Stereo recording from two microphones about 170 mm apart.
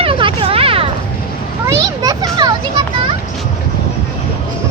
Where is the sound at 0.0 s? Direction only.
30° right (ahead or behind).